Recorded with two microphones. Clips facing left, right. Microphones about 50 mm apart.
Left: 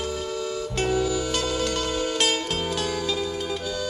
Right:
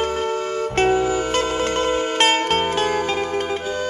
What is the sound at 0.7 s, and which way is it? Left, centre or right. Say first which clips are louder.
Music: right 6 dB; right.